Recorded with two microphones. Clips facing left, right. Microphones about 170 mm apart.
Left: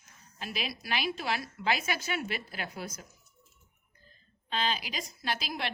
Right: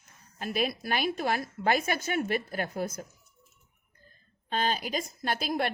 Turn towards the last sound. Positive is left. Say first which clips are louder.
# right 5 dB
turn(degrees=-50)  # may be behind; listen again after turning